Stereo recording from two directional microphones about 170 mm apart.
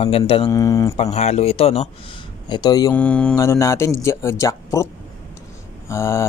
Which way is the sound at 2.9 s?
10° left (ahead or behind).